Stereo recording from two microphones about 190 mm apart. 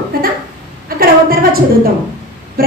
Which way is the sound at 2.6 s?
50° right (ahead or behind).